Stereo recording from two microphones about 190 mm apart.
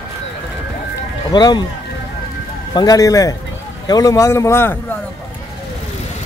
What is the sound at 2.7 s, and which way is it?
A man's voice, 20° left (ahead or behind).